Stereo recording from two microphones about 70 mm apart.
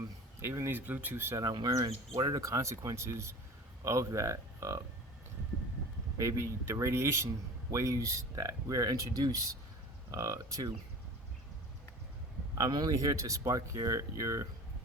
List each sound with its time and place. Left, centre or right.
0.4 s speech: right
0.7 s speech: right
1.4 s speech: right
2.4 s speech: right
6.1 s speech: right
12.5 s speech: right